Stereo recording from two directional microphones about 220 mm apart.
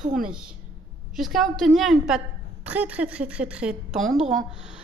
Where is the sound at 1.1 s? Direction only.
Centre (ahead or behind).